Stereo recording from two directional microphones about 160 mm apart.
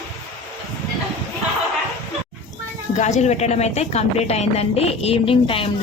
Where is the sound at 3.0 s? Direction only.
45° left (ahead or behind).